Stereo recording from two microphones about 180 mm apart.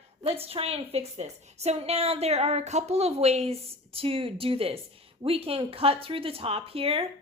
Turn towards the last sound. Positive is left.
turn(degrees=-30)  # may be behind; listen again after turning